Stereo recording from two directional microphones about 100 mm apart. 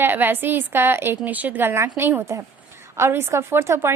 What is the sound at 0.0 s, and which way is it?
A woman's voice, 20° right (ahead or behind).